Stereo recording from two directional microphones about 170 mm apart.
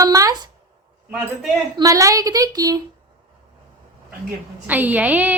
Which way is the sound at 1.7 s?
20° right (ahead or behind).